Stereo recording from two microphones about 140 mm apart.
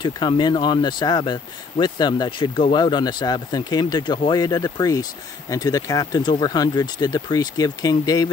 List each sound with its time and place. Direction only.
0.0 s speech: 30° left (ahead or behind)